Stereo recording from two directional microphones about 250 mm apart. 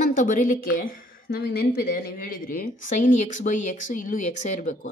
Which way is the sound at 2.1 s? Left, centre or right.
Left.